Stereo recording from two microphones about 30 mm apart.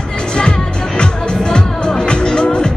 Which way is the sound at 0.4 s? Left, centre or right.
Left.